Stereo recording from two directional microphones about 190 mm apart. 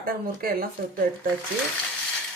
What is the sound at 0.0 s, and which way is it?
Speech, 50° right (ahead or behind).